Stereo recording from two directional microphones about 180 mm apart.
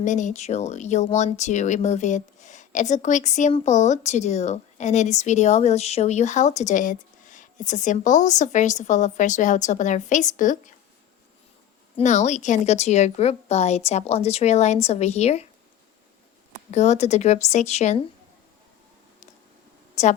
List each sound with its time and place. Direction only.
0.0 s speech: 45° left (ahead or behind)
11.9 s speech: 40° left (ahead or behind)
16.7 s speech: 40° left (ahead or behind)
20.0 s a woman's voice: 40° left (ahead or behind)